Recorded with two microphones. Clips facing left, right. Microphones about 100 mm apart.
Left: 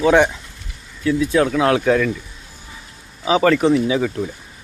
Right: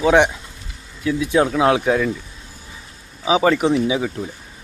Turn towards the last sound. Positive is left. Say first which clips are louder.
# left 1 dB
turn(degrees=-10)  # may be behind; listen again after turning